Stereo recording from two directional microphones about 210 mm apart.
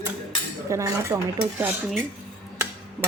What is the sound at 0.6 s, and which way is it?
Speech, 15° right (ahead or behind).